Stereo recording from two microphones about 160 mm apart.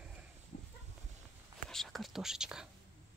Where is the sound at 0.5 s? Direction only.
70° left (ahead or behind).